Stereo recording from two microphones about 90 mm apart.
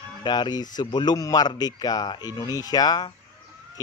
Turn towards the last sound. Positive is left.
turn(degrees=50)  # may be behind; listen again after turning